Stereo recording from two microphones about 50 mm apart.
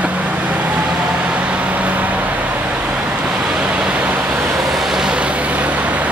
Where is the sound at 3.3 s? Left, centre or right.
Centre.